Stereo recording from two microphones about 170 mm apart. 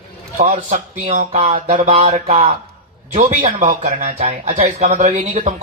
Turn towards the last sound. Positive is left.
turn(degrees=-45)  # may be behind; listen again after turning